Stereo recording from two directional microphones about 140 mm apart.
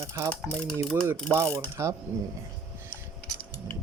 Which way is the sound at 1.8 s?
20° right (ahead or behind).